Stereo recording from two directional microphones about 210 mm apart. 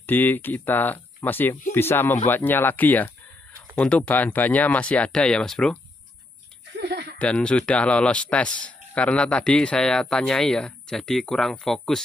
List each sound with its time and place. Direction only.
0.0 s speech: 10° left (ahead or behind)
6.8 s a sound: 50° right (ahead or behind)
7.2 s a man's voice: 5° left (ahead or behind)